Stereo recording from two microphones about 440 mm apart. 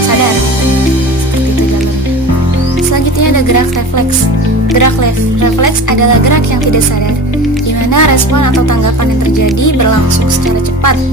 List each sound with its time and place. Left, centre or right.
2.9 s music: left
5.4 s speech: left
7.9 s music: left
9.4 s speech: left